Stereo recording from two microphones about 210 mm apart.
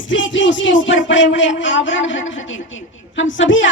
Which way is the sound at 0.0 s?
65° left (ahead or behind).